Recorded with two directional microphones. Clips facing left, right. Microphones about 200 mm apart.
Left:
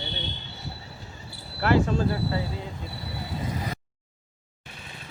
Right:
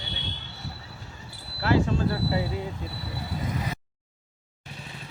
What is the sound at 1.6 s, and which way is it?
Speech, 55° left (ahead or behind).